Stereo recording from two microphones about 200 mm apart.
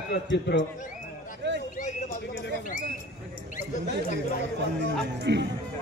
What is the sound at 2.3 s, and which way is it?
Speech, 55° left (ahead or behind).